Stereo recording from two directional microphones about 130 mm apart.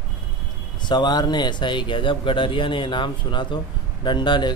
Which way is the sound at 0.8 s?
35° left (ahead or behind).